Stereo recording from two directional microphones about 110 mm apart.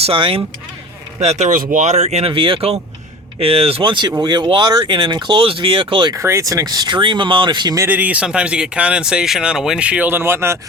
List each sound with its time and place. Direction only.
0.0 s speech: 55° right (ahead or behind)
1.2 s speech: 80° right
2.3 s speech: 50° right (ahead or behind)
6.1 s speech: 25° right (ahead or behind); by 7.8 s 45° right (ahead or behind)
7.8 s speech: 15° right (ahead or behind)